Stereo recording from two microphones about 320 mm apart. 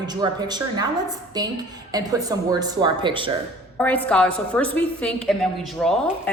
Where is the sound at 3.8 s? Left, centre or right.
Centre.